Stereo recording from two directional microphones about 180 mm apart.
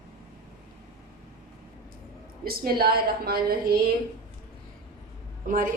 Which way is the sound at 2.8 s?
60° right (ahead or behind).